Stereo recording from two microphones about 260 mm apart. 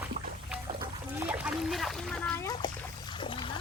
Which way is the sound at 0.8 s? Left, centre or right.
Centre.